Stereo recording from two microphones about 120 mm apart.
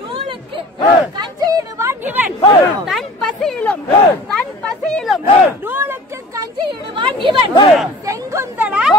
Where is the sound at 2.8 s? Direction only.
Centre (ahead or behind).